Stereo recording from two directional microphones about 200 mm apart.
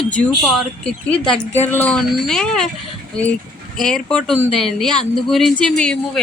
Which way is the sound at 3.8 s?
5° left (ahead or behind).